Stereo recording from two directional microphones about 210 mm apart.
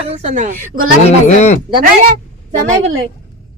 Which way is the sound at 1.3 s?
35° left (ahead or behind).